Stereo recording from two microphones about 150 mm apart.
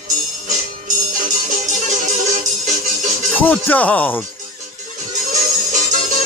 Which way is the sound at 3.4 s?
10° left (ahead or behind).